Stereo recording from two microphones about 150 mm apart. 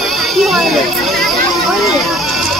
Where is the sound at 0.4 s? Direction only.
Centre (ahead or behind).